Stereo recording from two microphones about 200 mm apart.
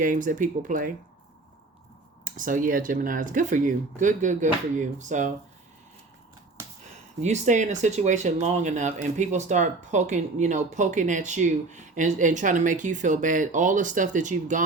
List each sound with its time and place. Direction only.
0.0 s speech: 40° right (ahead or behind)
2.2 s speech: 40° right (ahead or behind)
7.2 s speech: 35° right (ahead or behind)